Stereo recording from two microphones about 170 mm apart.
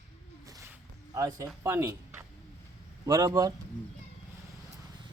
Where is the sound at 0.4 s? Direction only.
20° right (ahead or behind).